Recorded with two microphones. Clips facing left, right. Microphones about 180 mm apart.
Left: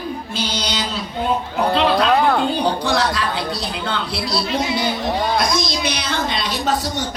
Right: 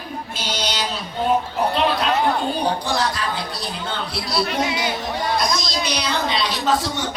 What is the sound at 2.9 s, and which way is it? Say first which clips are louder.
Speech: left 3 dB; 70° left (ahead or behind).